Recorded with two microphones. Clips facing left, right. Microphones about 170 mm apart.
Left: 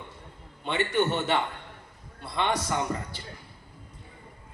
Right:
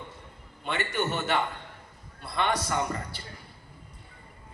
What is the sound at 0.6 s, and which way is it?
A man's voice, 25° left (ahead or behind).